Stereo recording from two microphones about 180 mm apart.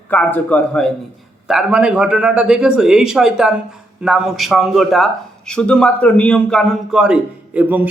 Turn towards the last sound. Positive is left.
turn(degrees=-10)  # may be behind; listen again after turning